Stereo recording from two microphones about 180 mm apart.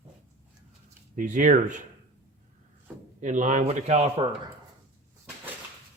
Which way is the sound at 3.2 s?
45° right (ahead or behind).